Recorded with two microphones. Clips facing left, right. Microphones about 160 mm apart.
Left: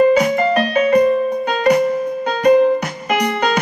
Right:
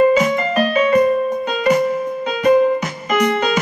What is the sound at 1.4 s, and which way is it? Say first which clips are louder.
Music: left 1 dB; 60° left (ahead or behind).